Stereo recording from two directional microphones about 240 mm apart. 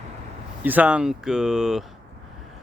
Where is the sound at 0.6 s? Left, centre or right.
Centre.